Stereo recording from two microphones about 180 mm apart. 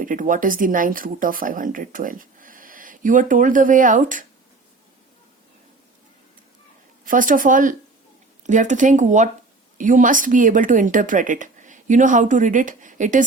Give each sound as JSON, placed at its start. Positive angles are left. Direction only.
{"t": 0.0, "sound": "speech", "side_deg": -50}
{"t": 7.0, "sound": "speech", "side_deg": -50}